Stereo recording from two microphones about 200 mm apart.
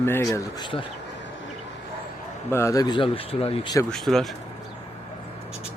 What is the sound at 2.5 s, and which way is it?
Speech, 15° left (ahead or behind).